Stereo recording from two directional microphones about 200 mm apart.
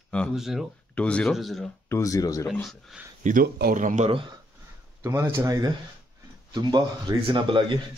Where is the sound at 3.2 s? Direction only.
40° right (ahead or behind).